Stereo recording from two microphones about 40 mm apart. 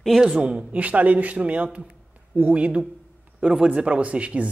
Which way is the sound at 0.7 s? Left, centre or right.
Right.